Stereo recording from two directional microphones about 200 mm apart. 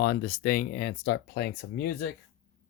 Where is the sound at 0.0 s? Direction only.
50° left (ahead or behind).